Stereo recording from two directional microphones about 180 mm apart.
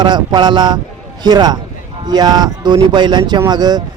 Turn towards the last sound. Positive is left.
turn(degrees=-25)  # may be behind; listen again after turning